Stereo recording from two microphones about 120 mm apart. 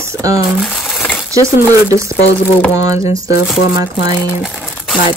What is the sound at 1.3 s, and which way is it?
Speech, 25° right (ahead or behind).